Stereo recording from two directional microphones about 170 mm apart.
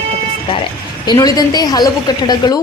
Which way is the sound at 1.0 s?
25° left (ahead or behind).